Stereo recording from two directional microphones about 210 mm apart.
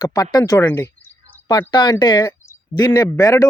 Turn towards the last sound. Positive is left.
turn(degrees=15)  # may be behind; listen again after turning